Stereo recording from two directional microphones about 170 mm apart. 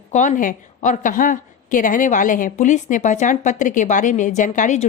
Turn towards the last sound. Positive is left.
turn(degrees=45)  # may be behind; listen again after turning